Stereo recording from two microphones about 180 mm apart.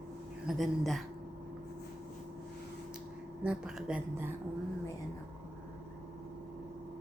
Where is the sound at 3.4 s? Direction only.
5° right (ahead or behind).